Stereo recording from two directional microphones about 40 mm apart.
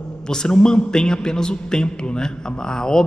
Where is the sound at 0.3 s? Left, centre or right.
Centre.